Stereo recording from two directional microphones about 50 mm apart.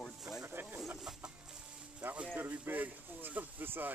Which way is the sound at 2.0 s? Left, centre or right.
Right.